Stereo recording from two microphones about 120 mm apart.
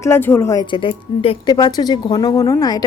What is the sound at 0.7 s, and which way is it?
Speech, 45° left (ahead or behind).